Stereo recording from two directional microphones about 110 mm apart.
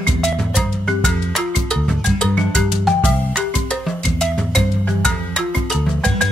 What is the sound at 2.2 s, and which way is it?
Music, 5° left (ahead or behind).